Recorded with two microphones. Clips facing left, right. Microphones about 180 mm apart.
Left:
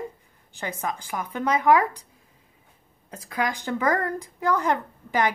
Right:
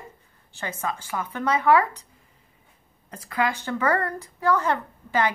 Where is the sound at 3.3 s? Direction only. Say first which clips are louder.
Right 1 dB; 15° left (ahead or behind).